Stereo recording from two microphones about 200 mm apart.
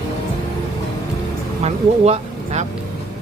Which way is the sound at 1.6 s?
35° right (ahead or behind).